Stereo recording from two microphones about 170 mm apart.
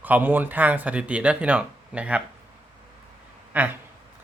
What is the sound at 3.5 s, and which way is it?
Speech, 10° right (ahead or behind).